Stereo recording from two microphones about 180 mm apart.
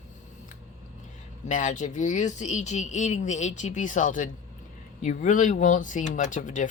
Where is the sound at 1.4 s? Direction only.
45° left (ahead or behind).